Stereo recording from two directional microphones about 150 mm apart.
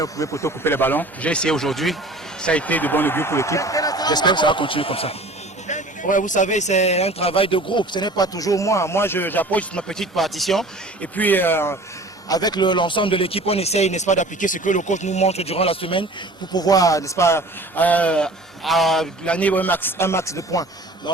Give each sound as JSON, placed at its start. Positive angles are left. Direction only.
{"t": 0.0, "sound": "a man's voice", "side_deg": 20}
{"t": 5.6, "sound": "speech", "side_deg": 55}
{"t": 12.3, "sound": "speech", "side_deg": 25}
{"t": 16.5, "sound": "a man's voice", "side_deg": 25}